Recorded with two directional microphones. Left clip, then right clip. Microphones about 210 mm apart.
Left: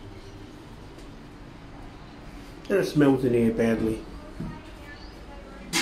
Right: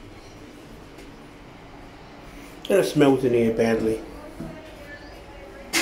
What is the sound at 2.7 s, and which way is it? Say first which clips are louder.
Speech: right 4 dB; 20° right (ahead or behind).